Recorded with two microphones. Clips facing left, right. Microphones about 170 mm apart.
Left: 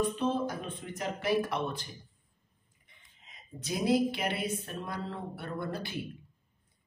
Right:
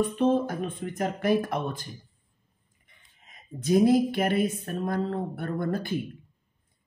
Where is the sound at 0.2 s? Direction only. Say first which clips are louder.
Right 7 dB; 55° right (ahead or behind).